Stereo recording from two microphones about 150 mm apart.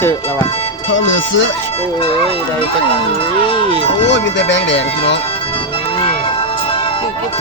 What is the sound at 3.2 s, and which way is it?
Speech, 35° left (ahead or behind).